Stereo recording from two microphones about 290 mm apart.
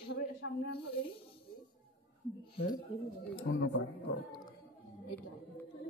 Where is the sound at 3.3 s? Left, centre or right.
Left.